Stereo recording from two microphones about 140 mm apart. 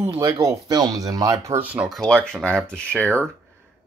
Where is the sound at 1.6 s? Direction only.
10° right (ahead or behind).